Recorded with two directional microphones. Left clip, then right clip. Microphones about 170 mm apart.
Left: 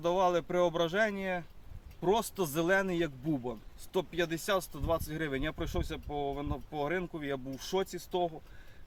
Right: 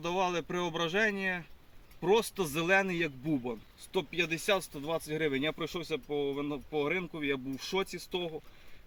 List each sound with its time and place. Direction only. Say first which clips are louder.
0.0 s speech: left 3 dB; 30° left (ahead or behind)